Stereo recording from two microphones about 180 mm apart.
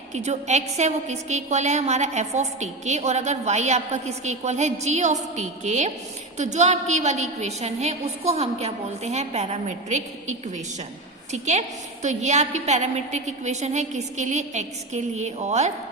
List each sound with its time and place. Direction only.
0.1 s a woman's voice: 40° right (ahead or behind)